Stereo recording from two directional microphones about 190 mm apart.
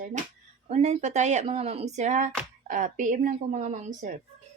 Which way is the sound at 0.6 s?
35° right (ahead or behind).